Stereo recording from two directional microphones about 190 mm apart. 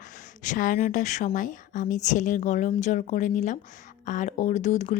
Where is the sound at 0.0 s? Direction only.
45° left (ahead or behind).